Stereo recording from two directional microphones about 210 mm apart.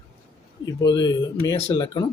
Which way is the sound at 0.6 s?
20° left (ahead or behind).